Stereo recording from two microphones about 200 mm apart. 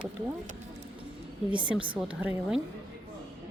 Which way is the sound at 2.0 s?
5° right (ahead or behind).